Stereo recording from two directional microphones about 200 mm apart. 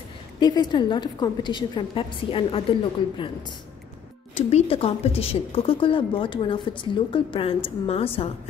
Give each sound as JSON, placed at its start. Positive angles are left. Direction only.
{"t": 0.4, "sound": "a woman's voice", "side_deg": 20}
{"t": 4.4, "sound": "a woman's voice", "side_deg": 30}